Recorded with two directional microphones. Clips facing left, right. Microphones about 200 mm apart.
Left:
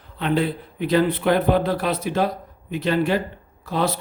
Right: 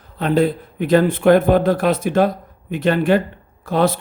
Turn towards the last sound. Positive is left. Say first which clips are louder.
# right 6 dB
turn(degrees=-50)  # may be behind; listen again after turning